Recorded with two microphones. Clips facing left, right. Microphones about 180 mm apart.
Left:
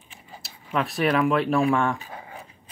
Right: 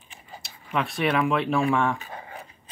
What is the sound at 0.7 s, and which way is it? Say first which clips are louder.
Speech: left 2 dB; centre (ahead or behind).